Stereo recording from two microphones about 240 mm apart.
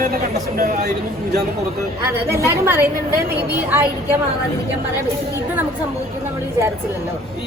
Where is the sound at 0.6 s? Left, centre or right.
Right.